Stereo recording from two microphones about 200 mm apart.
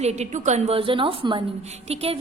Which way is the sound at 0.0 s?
35° right (ahead or behind).